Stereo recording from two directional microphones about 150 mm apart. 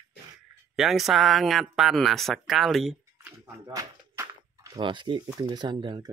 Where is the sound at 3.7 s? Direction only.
25° right (ahead or behind).